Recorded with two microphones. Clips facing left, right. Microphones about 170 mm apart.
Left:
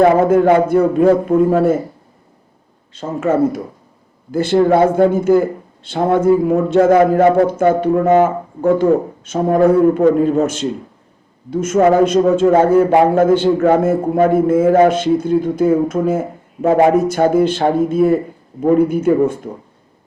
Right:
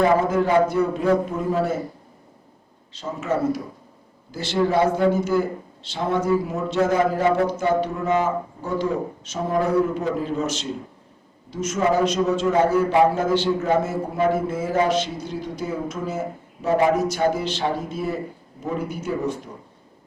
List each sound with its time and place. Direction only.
0.0 s a man's voice: 55° left (ahead or behind)
2.9 s a man's voice: 50° left (ahead or behind)